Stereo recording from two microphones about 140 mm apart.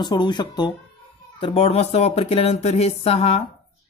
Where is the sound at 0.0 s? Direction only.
30° left (ahead or behind).